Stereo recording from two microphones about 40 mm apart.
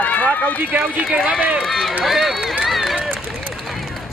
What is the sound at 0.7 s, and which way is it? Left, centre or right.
Speech, right.